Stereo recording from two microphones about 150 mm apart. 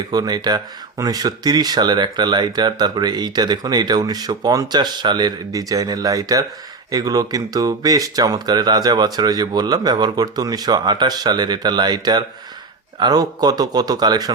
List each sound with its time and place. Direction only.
0.1 s speech: 25° right (ahead or behind)